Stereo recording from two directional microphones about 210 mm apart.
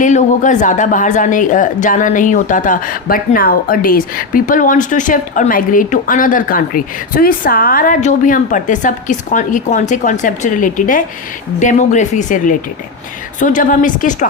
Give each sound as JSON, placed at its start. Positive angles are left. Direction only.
{"t": 0.0, "sound": "speech", "side_deg": 35}